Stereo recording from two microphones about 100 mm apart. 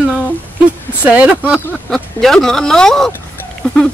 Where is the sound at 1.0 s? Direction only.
15° right (ahead or behind).